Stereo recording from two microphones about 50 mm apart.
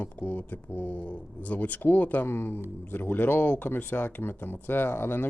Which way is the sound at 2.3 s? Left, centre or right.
Left.